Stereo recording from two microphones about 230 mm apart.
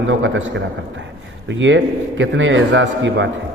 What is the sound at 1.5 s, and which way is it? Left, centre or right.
A man's voice, right.